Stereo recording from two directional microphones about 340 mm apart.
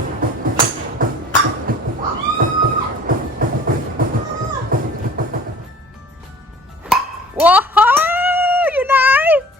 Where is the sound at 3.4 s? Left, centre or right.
Right.